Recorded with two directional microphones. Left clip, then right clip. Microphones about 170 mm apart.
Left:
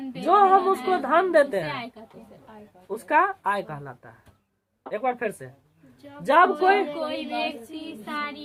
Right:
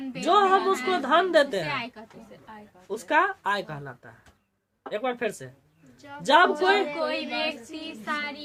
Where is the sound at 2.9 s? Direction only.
20° right (ahead or behind).